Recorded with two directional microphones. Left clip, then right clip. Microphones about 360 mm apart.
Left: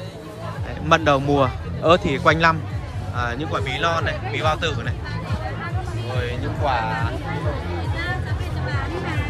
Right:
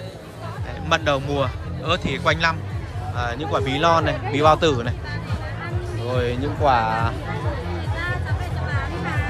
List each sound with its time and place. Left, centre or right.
0.8 s speech: centre
6.1 s speech: centre